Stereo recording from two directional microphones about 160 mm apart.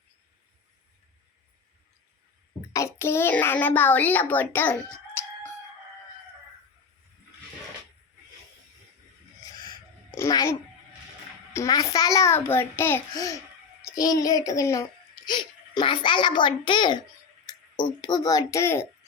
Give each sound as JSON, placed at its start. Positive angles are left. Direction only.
{"t": 2.7, "sound": "a child's voice", "side_deg": 15}
{"t": 10.1, "sound": "a child's voice", "side_deg": 20}